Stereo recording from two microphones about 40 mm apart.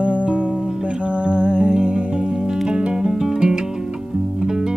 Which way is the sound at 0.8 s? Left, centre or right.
Right.